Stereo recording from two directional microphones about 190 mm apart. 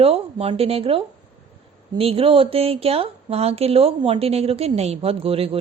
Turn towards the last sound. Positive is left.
turn(degrees=-30)  # may be behind; listen again after turning